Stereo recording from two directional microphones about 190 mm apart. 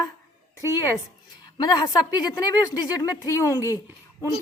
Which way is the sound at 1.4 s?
20° left (ahead or behind).